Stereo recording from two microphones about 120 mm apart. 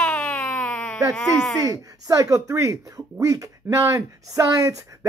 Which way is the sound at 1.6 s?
30° right (ahead or behind).